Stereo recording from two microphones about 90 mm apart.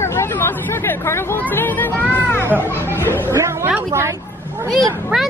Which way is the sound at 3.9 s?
30° right (ahead or behind).